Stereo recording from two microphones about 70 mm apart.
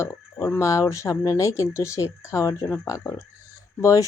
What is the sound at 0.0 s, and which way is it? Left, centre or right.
A woman's voice, left.